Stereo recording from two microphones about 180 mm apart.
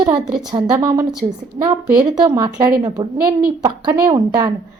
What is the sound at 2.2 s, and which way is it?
A woman's voice, 20° right (ahead or behind).